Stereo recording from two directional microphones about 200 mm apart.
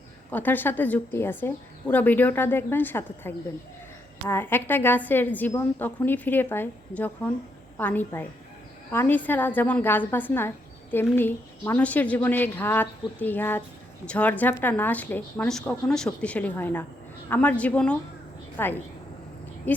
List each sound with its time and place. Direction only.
0.3 s a woman's voice: 10° left (ahead or behind)